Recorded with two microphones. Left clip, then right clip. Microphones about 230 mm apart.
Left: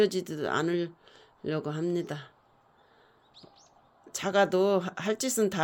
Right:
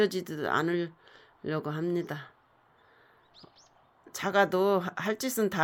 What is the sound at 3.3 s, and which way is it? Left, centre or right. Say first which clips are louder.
Bird: left 2 dB; right.